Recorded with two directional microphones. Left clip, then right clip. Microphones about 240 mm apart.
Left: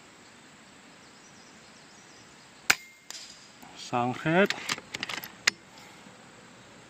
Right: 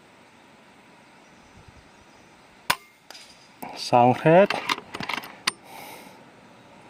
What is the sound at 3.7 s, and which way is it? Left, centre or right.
Speech, right.